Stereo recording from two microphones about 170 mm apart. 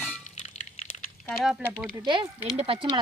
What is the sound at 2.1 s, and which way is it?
Speech, 35° right (ahead or behind).